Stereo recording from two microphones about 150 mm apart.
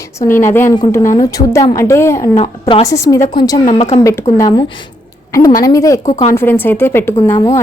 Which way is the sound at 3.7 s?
45° left (ahead or behind).